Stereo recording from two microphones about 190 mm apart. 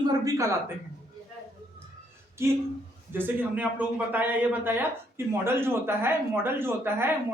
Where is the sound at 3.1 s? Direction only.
10° right (ahead or behind).